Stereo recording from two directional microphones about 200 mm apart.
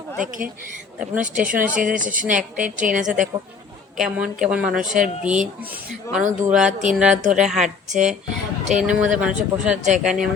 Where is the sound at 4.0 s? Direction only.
5° right (ahead or behind).